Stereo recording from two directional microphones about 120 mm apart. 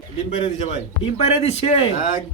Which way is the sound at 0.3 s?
50° left (ahead or behind).